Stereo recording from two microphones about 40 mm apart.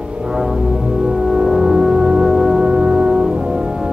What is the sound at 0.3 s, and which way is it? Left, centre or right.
Music, centre.